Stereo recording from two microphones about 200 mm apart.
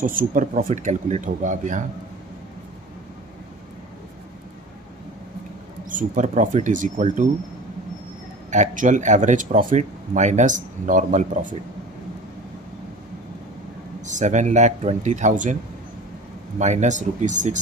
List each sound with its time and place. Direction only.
0.0 s speech: 45° right (ahead or behind)
5.9 s speech: 40° right (ahead or behind)
8.5 s speech: 40° right (ahead or behind)
14.1 s speech: 35° right (ahead or behind)
16.5 s speech: 35° right (ahead or behind)